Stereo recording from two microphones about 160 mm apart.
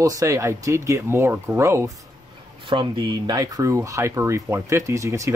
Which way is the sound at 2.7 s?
30° right (ahead or behind).